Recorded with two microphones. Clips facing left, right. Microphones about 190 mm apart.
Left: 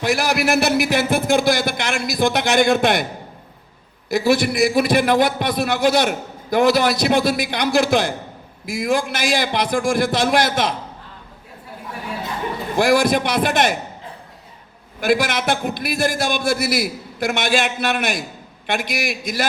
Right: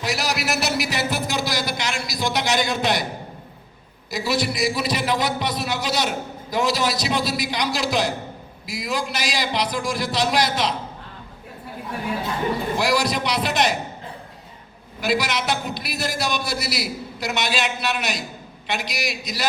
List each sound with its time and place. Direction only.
0.0 s a man's voice: 55° left (ahead or behind)
4.1 s a man's voice: 55° left (ahead or behind)
12.8 s a man's voice: 50° left (ahead or behind)
15.0 s a man's voice: 50° left (ahead or behind)